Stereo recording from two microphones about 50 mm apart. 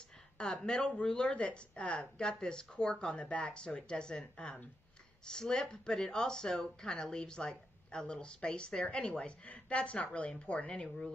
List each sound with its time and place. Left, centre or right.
0.4 s speech: centre